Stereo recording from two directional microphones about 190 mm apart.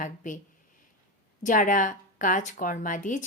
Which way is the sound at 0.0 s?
45° left (ahead or behind).